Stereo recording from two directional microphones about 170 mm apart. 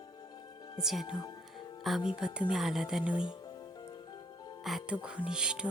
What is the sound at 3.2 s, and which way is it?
Music, 25° left (ahead or behind).